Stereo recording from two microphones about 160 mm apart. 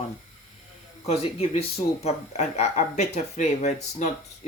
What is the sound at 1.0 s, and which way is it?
Speech, 40° left (ahead or behind).